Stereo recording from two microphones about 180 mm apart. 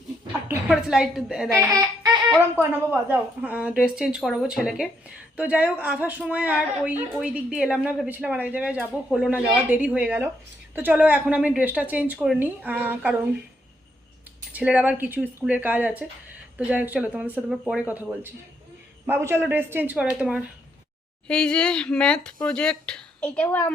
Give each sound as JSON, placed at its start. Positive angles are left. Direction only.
{"t": 0.7, "sound": "speech", "side_deg": 0}
{"t": 1.6, "sound": "music", "side_deg": -20}
{"t": 2.6, "sound": "a woman's voice", "side_deg": -10}
{"t": 14.5, "sound": "a woman's voice", "side_deg": -5}